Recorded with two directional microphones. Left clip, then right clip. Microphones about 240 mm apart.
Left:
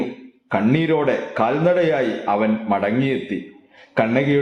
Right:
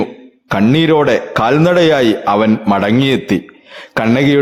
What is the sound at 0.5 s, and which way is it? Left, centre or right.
A man's voice, right.